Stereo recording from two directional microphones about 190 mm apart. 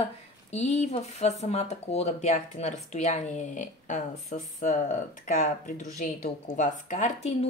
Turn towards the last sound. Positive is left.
turn(degrees=35)  # may be behind; listen again after turning